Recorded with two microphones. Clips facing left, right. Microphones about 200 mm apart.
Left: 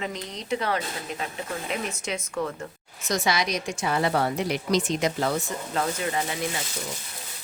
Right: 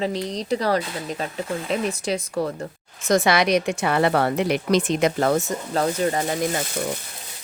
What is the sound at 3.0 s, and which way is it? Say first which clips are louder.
A woman's voice: right 7 dB; 55° right (ahead or behind).